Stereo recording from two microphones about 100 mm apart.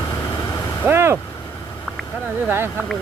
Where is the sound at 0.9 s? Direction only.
25° right (ahead or behind).